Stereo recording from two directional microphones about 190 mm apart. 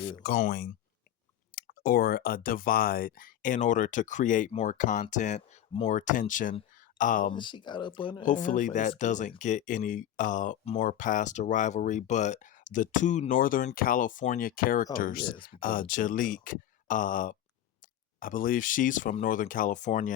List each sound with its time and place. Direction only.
0.2 s speech: 50° left (ahead or behind)
7.3 s speech: 25° left (ahead or behind)
8.2 s speech: 45° left (ahead or behind)